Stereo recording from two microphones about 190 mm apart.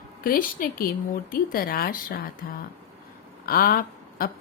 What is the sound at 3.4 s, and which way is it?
Speech, 50° left (ahead or behind).